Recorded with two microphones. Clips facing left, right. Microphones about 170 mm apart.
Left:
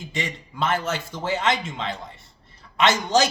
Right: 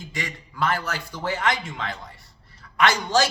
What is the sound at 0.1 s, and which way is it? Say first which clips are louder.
A man's voice: left 4 dB; 25° left (ahead or behind).